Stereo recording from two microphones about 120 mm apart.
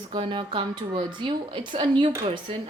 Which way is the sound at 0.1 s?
45° right (ahead or behind).